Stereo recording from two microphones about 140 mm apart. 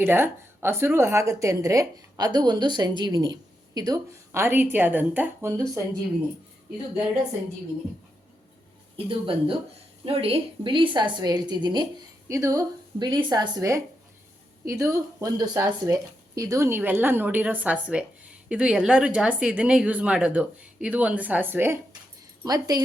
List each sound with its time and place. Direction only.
0.0 s a woman's voice: 15° right (ahead or behind)
9.0 s a woman's voice: 40° right (ahead or behind)
12.3 s a woman's voice: 20° right (ahead or behind)
13.1 s a woman's voice: 35° right (ahead or behind); by 21.8 s 15° right (ahead or behind)
22.4 s a woman's voice: 25° right (ahead or behind)